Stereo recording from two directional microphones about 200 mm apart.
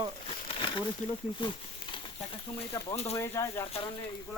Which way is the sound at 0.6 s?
25° left (ahead or behind).